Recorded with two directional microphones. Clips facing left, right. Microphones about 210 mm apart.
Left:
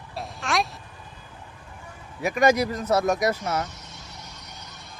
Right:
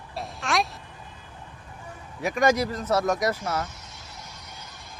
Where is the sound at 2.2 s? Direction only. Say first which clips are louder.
Left 2 dB; 10° left (ahead or behind).